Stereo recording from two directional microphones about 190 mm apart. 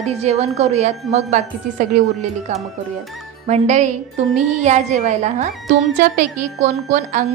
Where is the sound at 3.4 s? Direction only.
35° right (ahead or behind).